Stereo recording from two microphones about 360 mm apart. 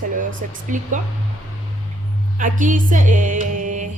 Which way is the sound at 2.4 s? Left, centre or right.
Right.